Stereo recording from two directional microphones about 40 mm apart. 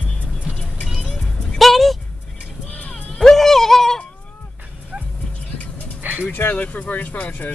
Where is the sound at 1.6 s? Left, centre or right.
Centre.